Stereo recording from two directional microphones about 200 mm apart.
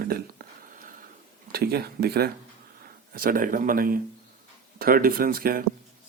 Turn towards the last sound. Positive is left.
turn(degrees=-45)  # may be behind; listen again after turning